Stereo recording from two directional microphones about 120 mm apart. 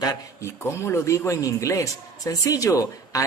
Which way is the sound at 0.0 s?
25° left (ahead or behind).